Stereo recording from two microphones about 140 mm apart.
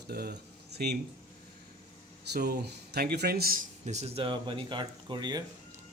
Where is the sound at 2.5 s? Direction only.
90° right; by 5.4 s 30° right (ahead or behind).